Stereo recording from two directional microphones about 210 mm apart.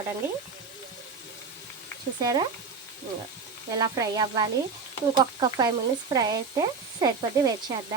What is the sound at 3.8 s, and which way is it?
Speech, 20° right (ahead or behind).